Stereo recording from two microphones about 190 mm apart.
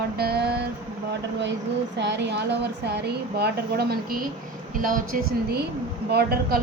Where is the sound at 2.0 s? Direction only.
65° right (ahead or behind).